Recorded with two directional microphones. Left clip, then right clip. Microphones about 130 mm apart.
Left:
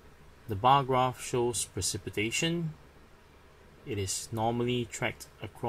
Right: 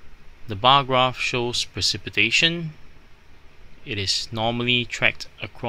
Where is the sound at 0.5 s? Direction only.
15° right (ahead or behind).